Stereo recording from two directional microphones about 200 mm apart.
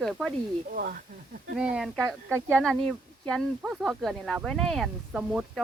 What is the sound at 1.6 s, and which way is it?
Speech, 5° right (ahead or behind).